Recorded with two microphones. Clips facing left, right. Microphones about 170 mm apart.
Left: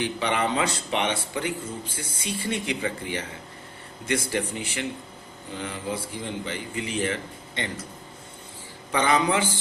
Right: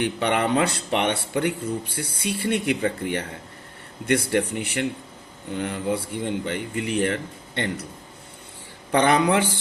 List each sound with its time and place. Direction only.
0.0 s speech: 60° right (ahead or behind)
8.9 s speech: 60° right (ahead or behind)